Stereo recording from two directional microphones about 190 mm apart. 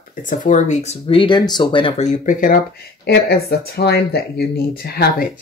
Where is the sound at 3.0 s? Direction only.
55° left (ahead or behind).